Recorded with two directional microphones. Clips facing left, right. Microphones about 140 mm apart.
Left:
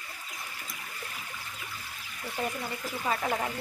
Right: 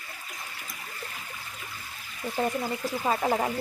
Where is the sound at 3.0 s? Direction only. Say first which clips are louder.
Right 4 dB; 35° right (ahead or behind).